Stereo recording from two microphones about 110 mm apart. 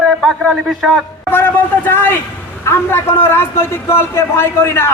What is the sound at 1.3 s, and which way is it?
A man's voice, 20° left (ahead or behind).